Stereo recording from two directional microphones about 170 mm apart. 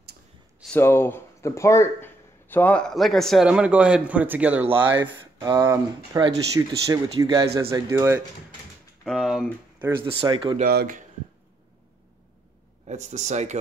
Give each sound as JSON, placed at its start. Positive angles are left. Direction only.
{"t": 0.7, "sound": "speech", "side_deg": 15}
{"t": 9.0, "sound": "speech", "side_deg": 0}
{"t": 10.0, "sound": "speech", "side_deg": -30}
{"t": 10.6, "sound": "speech", "side_deg": -65}
{"t": 12.8, "sound": "speech", "side_deg": -45}